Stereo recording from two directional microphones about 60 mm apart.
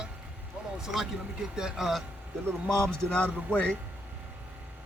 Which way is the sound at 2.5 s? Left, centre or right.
Centre.